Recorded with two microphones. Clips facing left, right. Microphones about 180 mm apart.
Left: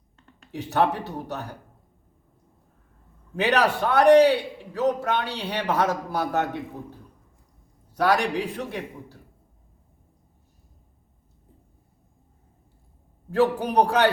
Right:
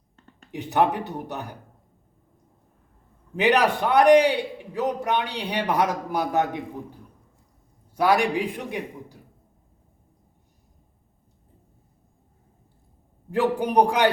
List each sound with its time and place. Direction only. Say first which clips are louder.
0.5 s a man's voice: right 1 dB; 15° right (ahead or behind)
3.3 s a man's voice: right 2 dB; 15° right (ahead or behind)
7.9 s a man's voice: right 1 dB; 10° right (ahead or behind)
13.3 s a man's voice: even; 15° right (ahead or behind)